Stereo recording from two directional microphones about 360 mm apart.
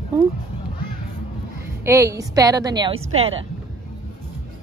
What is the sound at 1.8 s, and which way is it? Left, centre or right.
A woman's voice, centre.